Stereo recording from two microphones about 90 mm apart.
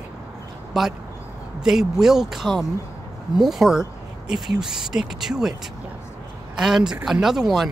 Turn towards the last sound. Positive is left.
turn(degrees=-5)  # may be behind; listen again after turning